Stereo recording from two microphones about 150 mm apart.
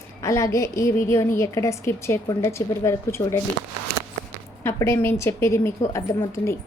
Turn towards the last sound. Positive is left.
turn(degrees=20)  # may be behind; listen again after turning